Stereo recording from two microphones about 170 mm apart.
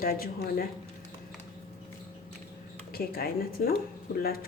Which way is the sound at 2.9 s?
60° left (ahead or behind).